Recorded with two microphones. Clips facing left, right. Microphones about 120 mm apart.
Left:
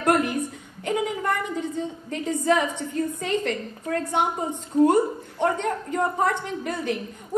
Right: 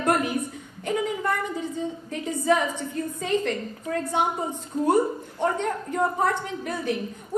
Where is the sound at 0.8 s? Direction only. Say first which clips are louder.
Left 1 dB; 65° left (ahead or behind).